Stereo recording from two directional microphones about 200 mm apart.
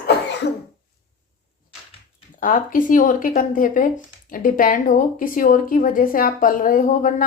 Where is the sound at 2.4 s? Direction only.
45° left (ahead or behind).